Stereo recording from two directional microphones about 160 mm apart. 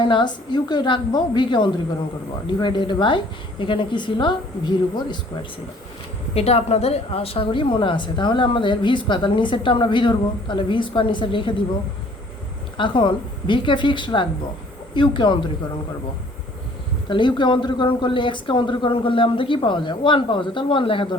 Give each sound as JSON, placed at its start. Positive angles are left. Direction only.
{"t": 0.0, "sound": "a woman's voice", "side_deg": 30}
{"t": 6.3, "sound": "a woman's voice", "side_deg": 40}
{"t": 12.7, "sound": "a woman's voice", "side_deg": 30}
{"t": 17.1, "sound": "a woman's voice", "side_deg": 30}